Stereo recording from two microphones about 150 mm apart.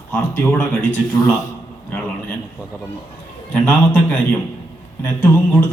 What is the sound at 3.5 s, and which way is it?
Speech, 10° left (ahead or behind).